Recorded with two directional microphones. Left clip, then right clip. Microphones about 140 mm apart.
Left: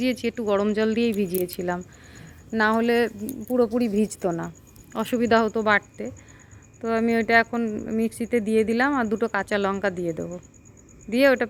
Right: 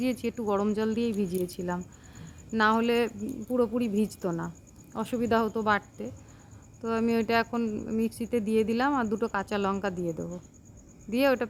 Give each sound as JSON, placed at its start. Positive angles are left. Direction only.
{"t": 0.0, "sound": "a woman's voice", "side_deg": 15}
{"t": 5.3, "sound": "a woman's voice", "side_deg": 20}